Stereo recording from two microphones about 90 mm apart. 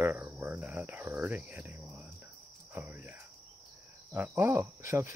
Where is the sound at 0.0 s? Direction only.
20° right (ahead or behind).